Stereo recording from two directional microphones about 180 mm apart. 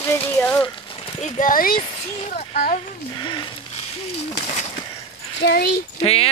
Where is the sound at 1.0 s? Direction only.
40° left (ahead or behind).